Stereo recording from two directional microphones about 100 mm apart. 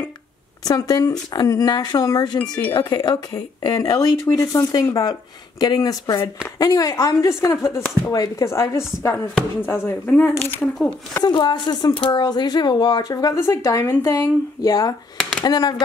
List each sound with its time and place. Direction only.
0.7 s speech: 40° left (ahead or behind)
2.4 s speech: 10° left (ahead or behind)
2.7 s speech: 45° left (ahead or behind); by 7.8 s 30° left (ahead or behind)
8.0 s speech: 40° left (ahead or behind); by 10.3 s 15° left (ahead or behind)
11.3 s speech: 50° left (ahead or behind)
15.1 s a sound: 5° left (ahead or behind)
15.4 s speech: 40° left (ahead or behind)